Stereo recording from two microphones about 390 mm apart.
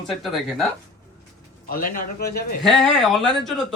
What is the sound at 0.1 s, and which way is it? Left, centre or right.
Speech, centre.